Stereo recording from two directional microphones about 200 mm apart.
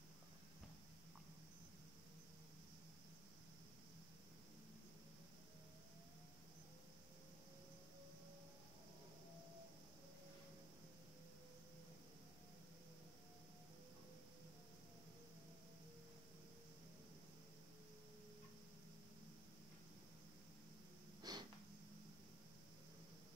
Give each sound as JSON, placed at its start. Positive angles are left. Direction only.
{"t": 21.2, "sound": "snort", "side_deg": -20}